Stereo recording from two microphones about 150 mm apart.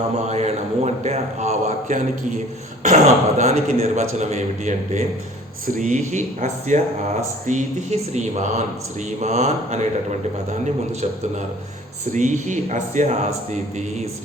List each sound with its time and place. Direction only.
0.3 s speech: 45° right (ahead or behind)
12.1 s speech: 55° right (ahead or behind)